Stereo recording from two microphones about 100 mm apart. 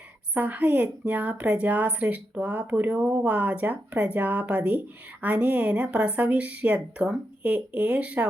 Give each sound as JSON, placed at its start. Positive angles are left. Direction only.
{"t": 0.3, "sound": "a woman's voice", "side_deg": -15}